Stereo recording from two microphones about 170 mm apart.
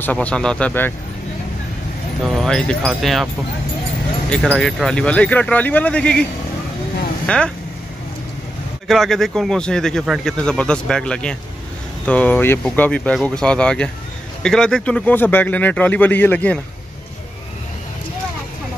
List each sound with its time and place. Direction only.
0.0 s speech: 10° left (ahead or behind)
2.2 s speech: centre (ahead or behind)
4.3 s speech: 5° left (ahead or behind)
7.2 s speech: 5° left (ahead or behind)
8.8 s speech: centre (ahead or behind)